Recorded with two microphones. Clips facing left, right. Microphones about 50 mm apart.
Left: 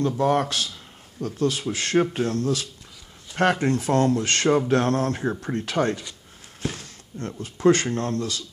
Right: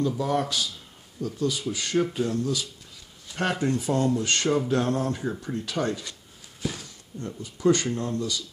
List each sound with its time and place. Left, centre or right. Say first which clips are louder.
0.2 s speech: left 4 dB; left
4.5 s mantra: left 5 dB; left
4.7 s speech: left 3 dB; left
6.8 s speech: left 3 dB; left